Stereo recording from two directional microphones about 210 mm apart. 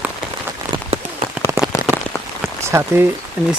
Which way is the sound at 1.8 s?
40° right (ahead or behind).